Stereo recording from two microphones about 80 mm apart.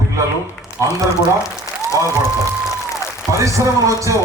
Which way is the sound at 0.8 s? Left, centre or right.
Right.